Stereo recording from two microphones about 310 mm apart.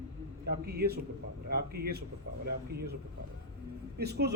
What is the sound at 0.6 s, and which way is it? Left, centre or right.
Speech, right.